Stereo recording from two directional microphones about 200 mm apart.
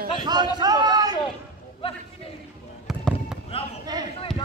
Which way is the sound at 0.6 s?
20° right (ahead or behind).